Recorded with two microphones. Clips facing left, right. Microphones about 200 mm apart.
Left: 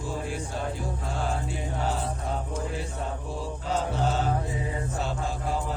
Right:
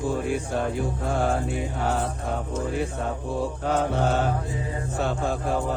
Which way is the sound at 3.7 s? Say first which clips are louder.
Right 3 dB; 60° right (ahead or behind).